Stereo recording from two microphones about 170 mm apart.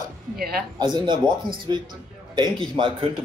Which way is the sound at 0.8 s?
25° right (ahead or behind).